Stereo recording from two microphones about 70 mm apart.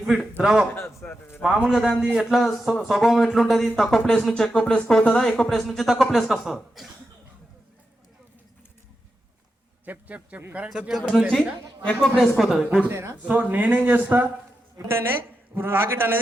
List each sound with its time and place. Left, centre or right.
0.0 s a man's voice: centre
1.0 s speech: left
1.4 s a man's voice: centre
9.8 s a man's voice: right
10.7 s a man's voice: centre
11.9 s speech: centre
12.4 s speech: centre
12.9 s a man's voice: right
13.2 s a man's voice: right